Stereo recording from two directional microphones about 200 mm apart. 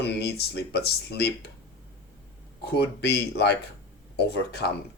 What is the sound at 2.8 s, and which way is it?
Speech, 55° left (ahead or behind).